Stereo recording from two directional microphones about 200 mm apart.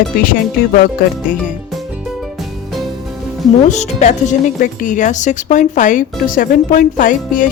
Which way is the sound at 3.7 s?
35° left (ahead or behind).